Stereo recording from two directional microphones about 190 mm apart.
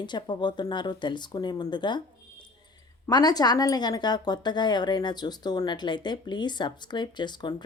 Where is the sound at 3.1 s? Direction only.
20° left (ahead or behind).